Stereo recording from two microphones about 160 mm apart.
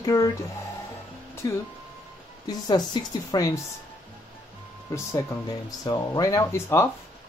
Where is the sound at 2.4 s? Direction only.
25° left (ahead or behind).